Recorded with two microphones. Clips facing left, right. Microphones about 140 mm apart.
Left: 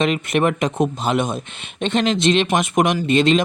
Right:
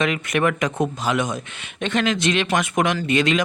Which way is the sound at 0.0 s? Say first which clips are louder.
Left 3 dB; 25° left (ahead or behind).